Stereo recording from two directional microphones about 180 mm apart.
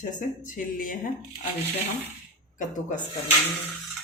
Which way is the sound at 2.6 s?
45° left (ahead or behind).